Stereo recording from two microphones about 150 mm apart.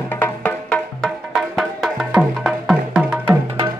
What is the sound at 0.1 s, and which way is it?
Music, 10° left (ahead or behind).